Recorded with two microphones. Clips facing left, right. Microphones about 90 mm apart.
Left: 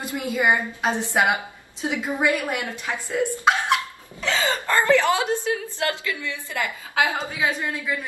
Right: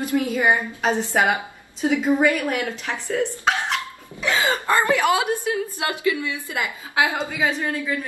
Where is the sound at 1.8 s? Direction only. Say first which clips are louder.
Right 5 dB; 15° left (ahead or behind).